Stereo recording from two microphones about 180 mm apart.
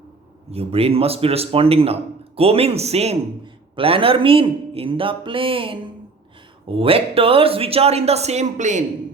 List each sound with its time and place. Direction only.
0.5 s speech: 35° right (ahead or behind)